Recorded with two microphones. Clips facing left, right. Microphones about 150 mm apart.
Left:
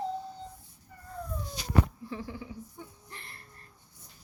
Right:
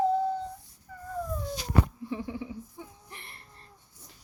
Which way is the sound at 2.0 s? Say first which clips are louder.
Right 4 dB; 20° right (ahead or behind).